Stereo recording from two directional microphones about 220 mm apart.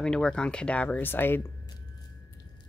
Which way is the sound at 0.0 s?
5° left (ahead or behind).